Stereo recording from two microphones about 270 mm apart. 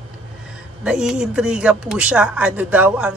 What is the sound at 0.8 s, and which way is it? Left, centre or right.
A man's voice, centre.